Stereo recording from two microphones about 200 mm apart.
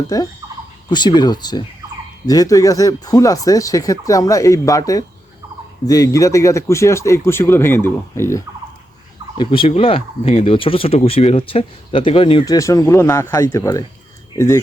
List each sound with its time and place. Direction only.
0.1 s speech: 20° left (ahead or behind)
9.4 s speech: 25° left (ahead or behind)